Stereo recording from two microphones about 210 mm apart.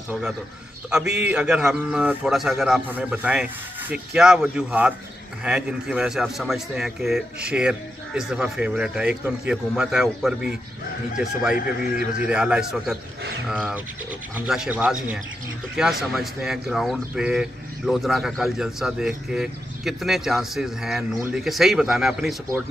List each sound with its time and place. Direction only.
0.8 s speech: 5° right (ahead or behind)
11.5 s speech: 40° left (ahead or behind)
12.3 s speech: 5° right (ahead or behind)